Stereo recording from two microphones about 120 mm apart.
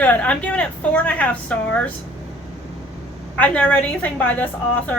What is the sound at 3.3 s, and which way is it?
A woman's voice, 10° left (ahead or behind).